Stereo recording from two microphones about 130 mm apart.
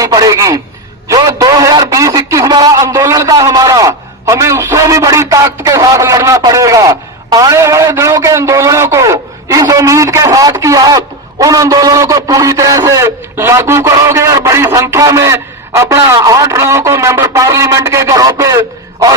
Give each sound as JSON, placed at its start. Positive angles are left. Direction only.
{"t": 0.0, "sound": "a man's voice", "side_deg": -30}